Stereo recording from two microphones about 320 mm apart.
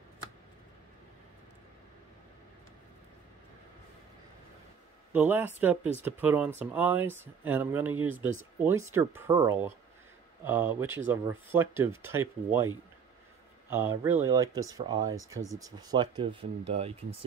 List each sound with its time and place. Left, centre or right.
5.1 s speech: centre
13.7 s speech: centre